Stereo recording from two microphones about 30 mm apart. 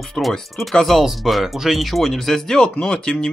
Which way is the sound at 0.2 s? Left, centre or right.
Centre.